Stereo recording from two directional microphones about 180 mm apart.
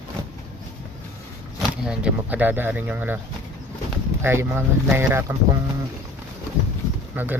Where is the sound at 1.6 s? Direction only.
5° right (ahead or behind).